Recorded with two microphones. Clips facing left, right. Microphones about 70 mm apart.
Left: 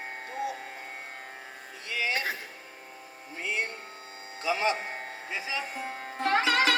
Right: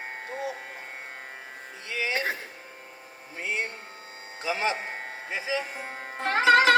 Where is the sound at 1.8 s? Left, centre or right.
Right.